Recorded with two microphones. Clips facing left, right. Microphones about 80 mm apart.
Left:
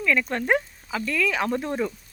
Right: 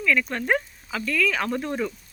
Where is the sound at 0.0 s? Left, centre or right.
Left.